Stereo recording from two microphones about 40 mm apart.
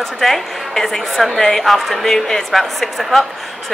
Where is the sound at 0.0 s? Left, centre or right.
Centre.